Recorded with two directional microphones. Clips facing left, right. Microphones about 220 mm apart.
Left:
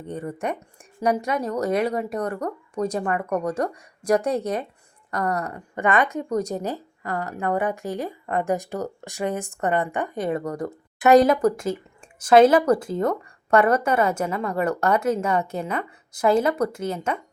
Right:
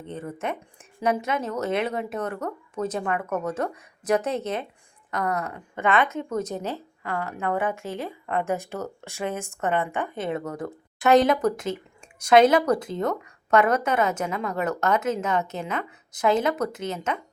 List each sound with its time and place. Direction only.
0.0 s a woman's voice: 15° left (ahead or behind)
5.7 s a woman's voice: 15° left (ahead or behind)
7.0 s speech: 40° left (ahead or behind)
7.8 s a woman's voice: 15° left (ahead or behind)